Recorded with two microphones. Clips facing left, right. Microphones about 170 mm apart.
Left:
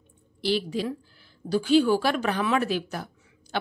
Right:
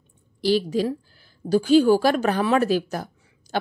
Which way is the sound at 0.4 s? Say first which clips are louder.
Right 5 dB; 40° right (ahead or behind).